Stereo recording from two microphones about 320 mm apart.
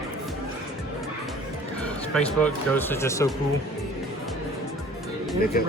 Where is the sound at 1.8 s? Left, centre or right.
Centre.